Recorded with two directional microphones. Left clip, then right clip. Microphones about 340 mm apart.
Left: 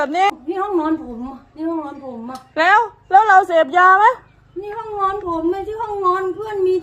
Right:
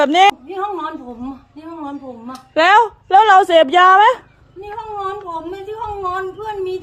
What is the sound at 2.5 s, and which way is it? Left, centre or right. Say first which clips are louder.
Speech: right 3 dB; right.